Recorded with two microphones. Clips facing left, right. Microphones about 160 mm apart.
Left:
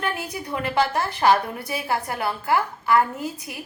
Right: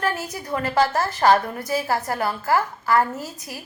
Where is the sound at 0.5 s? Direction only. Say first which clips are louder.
Right 2 dB; 15° left (ahead or behind).